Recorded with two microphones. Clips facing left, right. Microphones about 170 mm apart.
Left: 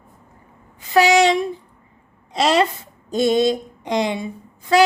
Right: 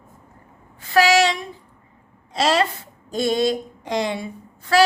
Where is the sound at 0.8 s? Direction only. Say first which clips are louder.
Left 2 dB; 20° left (ahead or behind).